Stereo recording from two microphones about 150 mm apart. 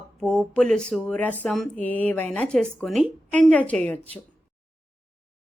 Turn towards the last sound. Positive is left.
turn(degrees=10)  # may be behind; listen again after turning